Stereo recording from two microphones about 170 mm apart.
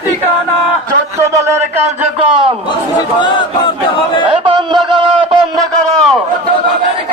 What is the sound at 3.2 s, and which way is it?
Chant, 30° left (ahead or behind).